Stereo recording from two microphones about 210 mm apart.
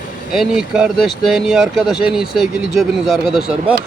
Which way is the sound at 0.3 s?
Centre (ahead or behind).